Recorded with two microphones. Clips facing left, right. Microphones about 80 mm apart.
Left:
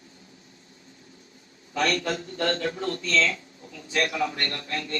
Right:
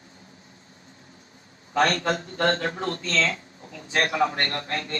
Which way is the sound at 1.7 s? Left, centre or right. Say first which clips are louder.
Right 3 dB; right.